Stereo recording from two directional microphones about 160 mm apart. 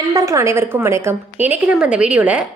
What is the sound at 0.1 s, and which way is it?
A woman's voice, 20° right (ahead or behind).